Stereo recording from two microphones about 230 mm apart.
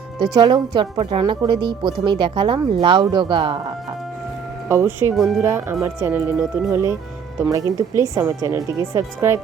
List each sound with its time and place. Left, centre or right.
0.2 s a woman's voice: centre
4.7 s speech: centre
5.1 s speech: centre
5.4 s speech: centre